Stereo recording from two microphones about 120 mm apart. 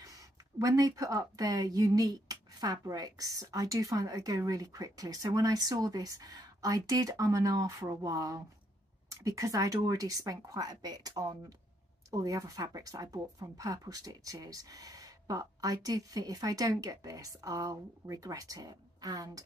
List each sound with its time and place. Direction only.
0.0 s speech: 30° right (ahead or behind)